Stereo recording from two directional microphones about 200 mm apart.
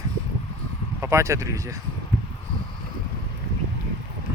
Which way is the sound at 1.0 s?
15° right (ahead or behind).